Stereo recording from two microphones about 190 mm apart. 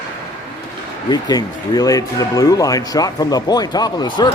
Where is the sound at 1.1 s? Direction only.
20° left (ahead or behind).